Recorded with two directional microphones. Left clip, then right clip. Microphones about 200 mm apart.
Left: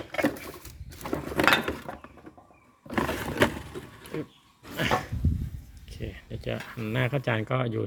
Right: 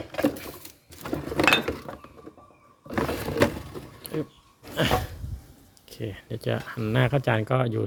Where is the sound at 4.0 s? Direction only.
20° right (ahead or behind).